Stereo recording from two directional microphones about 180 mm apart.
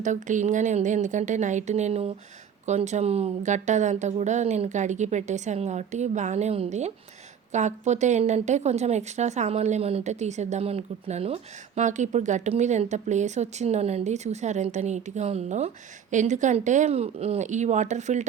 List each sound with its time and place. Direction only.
0.0 s a woman's voice: 45° right (ahead or behind)